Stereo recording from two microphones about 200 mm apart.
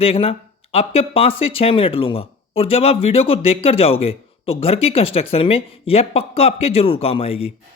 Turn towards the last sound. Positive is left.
turn(degrees=30)  # may be behind; listen again after turning